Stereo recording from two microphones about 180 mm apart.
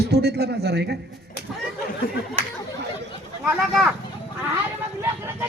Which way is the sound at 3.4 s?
Centre (ahead or behind).